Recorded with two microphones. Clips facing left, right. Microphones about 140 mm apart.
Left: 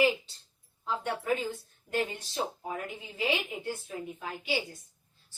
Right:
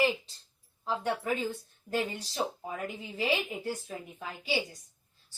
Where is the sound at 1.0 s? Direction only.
40° right (ahead or behind).